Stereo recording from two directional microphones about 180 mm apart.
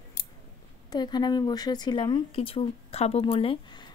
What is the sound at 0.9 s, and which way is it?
Speech, 25° left (ahead or behind).